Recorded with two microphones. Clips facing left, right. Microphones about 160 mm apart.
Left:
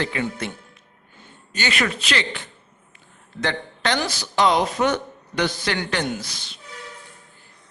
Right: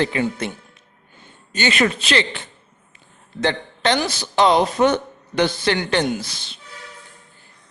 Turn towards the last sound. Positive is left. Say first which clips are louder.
# right 4 dB
turn(degrees=-25)  # may be behind; listen again after turning